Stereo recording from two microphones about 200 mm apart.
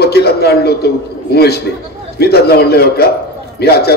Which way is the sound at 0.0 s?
55° left (ahead or behind).